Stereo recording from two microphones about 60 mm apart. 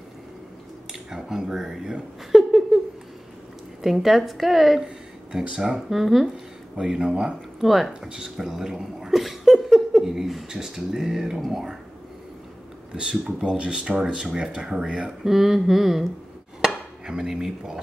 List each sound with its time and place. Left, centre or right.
1.1 s speech: centre
3.8 s a woman's voice: centre
6.8 s speech: centre
7.6 s a woman's voice: centre
12.9 s speech: centre
15.2 s a woman's voice: centre
16.6 s cutlery: centre